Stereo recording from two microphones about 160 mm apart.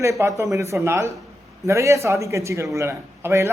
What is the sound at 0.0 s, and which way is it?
A man's voice, 20° right (ahead or behind).